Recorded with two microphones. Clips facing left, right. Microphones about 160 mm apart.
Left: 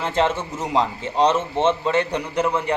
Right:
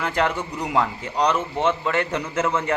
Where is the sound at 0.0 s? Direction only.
25° left (ahead or behind).